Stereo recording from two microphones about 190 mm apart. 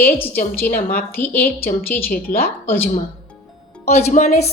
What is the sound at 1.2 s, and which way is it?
Speech, 10° left (ahead or behind).